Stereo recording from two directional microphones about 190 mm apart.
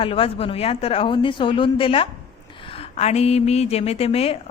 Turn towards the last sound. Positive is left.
turn(degrees=30)  # may be behind; listen again after turning